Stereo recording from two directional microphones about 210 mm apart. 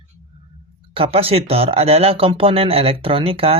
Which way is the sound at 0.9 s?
25° right (ahead or behind).